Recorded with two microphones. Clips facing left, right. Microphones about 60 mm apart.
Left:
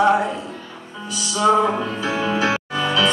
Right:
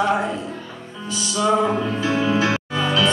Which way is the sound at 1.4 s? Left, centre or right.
Centre.